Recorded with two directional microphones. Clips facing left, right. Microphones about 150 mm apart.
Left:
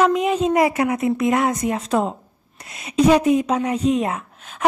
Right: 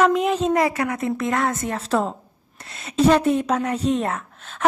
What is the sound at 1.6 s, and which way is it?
A woman's voice, 10° left (ahead or behind).